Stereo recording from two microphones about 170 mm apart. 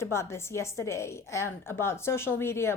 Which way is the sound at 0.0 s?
15° left (ahead or behind).